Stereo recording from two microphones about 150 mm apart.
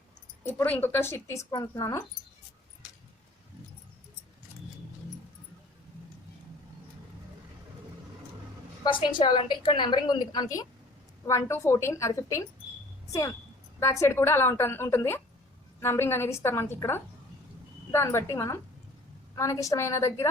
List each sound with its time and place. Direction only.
0.4 s speech: 10° left (ahead or behind)
8.8 s a woman's voice: 35° left (ahead or behind)
13.7 s a woman's voice: 20° left (ahead or behind)